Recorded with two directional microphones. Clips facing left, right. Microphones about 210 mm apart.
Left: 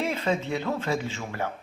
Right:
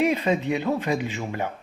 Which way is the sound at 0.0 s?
15° right (ahead or behind).